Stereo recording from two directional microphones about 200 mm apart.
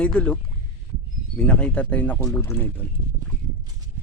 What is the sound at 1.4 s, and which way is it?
Speech, 5° left (ahead or behind).